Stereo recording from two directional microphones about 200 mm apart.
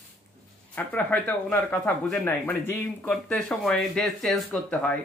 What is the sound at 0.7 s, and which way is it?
Speech, 5° left (ahead or behind).